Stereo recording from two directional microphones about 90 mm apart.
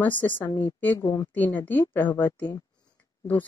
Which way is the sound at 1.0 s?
40° left (ahead or behind).